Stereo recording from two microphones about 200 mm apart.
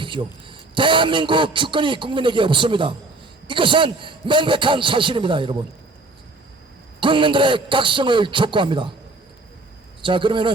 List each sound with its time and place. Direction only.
0.0 s a man's voice: 25° right (ahead or behind)
7.0 s a man's voice: 25° right (ahead or behind)
10.0 s a man's voice: 25° right (ahead or behind)